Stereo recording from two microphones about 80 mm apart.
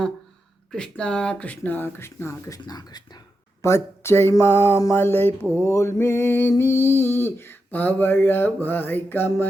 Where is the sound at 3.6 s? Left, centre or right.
Left.